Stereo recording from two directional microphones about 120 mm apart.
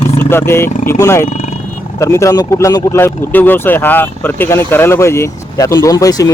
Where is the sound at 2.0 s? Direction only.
25° left (ahead or behind).